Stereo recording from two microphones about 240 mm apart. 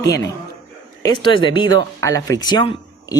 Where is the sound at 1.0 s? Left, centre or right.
Centre.